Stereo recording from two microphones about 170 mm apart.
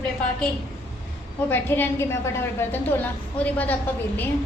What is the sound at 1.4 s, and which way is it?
A woman's voice, 10° left (ahead or behind).